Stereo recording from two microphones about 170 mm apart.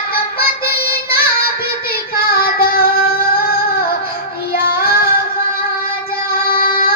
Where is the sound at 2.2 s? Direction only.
60° left (ahead or behind).